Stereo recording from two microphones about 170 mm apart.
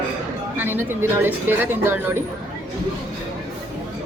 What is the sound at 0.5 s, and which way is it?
Speech, 10° right (ahead or behind).